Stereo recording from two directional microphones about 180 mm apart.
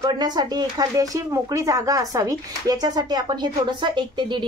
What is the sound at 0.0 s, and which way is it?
Speech, 25° right (ahead or behind).